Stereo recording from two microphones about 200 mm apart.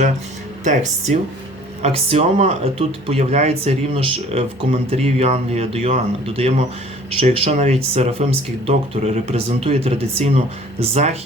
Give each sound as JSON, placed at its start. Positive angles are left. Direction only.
{"t": 0.6, "sound": "speech", "side_deg": -35}